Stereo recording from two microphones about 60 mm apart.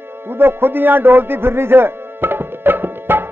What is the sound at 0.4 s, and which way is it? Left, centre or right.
Music, right.